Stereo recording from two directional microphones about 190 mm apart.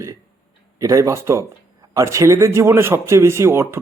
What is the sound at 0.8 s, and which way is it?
Speech, 15° right (ahead or behind).